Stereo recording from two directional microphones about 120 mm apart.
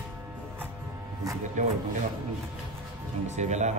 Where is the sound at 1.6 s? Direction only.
90° right.